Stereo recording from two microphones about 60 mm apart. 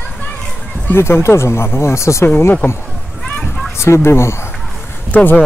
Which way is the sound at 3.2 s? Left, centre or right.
Centre.